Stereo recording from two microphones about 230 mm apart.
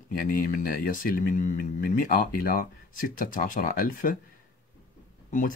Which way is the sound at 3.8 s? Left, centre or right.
Left.